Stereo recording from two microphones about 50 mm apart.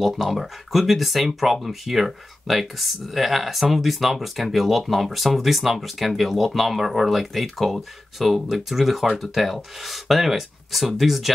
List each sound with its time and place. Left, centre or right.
0.1 s speech: centre